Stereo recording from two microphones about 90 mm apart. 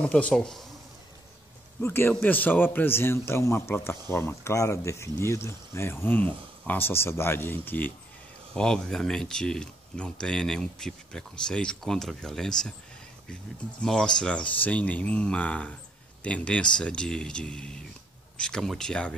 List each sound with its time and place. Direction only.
0.0 s speech: 10° left (ahead or behind)
1.8 s a man's voice: 25° left (ahead or behind)
8.5 s speech: 10° left (ahead or behind)
13.8 s speech: 5° left (ahead or behind)